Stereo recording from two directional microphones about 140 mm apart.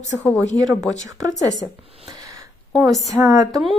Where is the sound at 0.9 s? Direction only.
25° right (ahead or behind).